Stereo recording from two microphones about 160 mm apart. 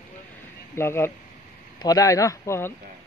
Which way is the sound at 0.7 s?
15° left (ahead or behind).